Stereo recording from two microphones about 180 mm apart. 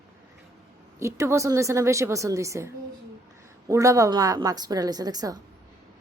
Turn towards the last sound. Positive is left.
turn(degrees=-20)  # may be behind; listen again after turning